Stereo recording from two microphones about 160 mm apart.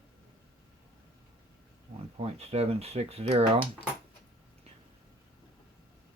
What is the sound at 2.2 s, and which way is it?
Speech, 40° right (ahead or behind).